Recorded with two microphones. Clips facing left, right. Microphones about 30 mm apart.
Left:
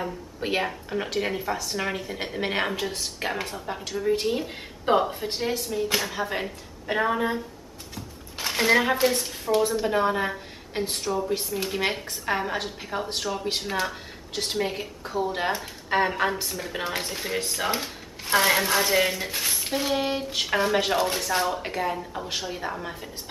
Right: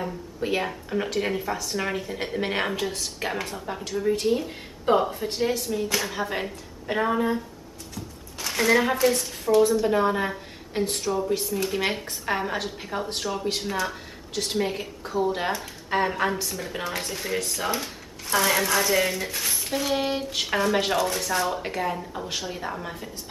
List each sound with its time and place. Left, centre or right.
0.4 s speech: centre
0.7 s a woman's voice: centre
7.9 s a sound: left
9.0 s a woman's voice: centre
18.2 s a sound: left
18.5 s a woman's voice: centre
21.0 s a woman's voice: centre
21.5 s speech: centre